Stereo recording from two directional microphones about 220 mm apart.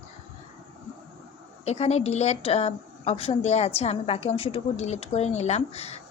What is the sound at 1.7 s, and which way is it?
A woman's voice, 30° left (ahead or behind).